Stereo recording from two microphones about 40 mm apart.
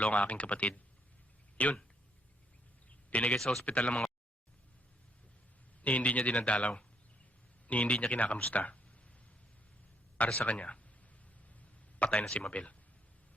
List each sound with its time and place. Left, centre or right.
0.0 s speech: left
3.1 s a man's voice: left
3.3 s speech: centre
3.8 s speech: left
5.8 s speech: left
10.3 s speech: left
11.9 s speech: left